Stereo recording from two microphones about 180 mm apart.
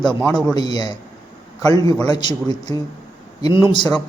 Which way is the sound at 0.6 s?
25° left (ahead or behind).